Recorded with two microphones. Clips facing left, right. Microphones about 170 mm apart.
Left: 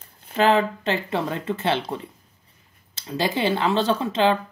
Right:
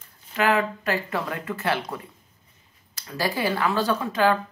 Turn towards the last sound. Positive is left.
turn(degrees=25)  # may be behind; listen again after turning